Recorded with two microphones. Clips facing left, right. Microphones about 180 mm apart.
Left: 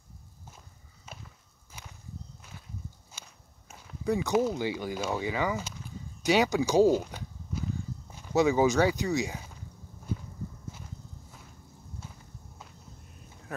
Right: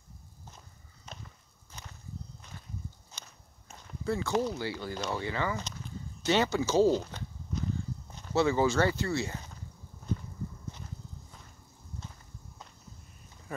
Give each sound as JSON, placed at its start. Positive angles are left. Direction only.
{"t": 1.0, "sound": "walk", "side_deg": 5}
{"t": 3.1, "sound": "speech", "side_deg": 10}
{"t": 10.1, "sound": "walk", "side_deg": 10}